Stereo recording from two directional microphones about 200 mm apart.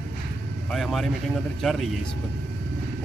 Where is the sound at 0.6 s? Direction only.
Centre (ahead or behind).